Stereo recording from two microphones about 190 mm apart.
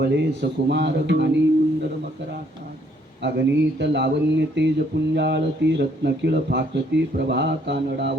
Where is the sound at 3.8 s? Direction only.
65° right (ahead or behind).